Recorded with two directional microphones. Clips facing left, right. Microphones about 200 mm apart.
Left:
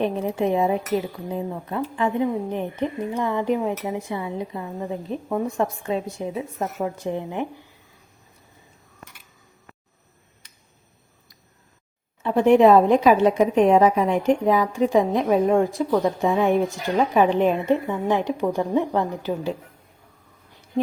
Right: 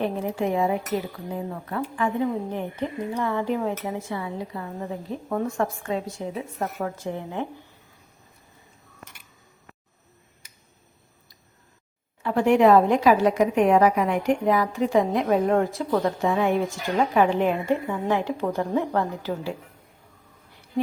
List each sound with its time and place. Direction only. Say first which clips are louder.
0.0 s a woman's voice: left 3 dB; 20° left (ahead or behind)
12.2 s a woman's voice: left 3 dB; 20° left (ahead or behind)